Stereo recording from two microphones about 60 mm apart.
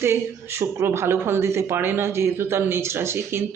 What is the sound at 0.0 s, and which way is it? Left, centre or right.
Speech, right.